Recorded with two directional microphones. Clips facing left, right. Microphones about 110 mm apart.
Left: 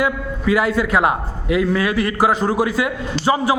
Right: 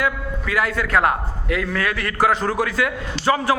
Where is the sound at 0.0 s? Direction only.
15° left (ahead or behind).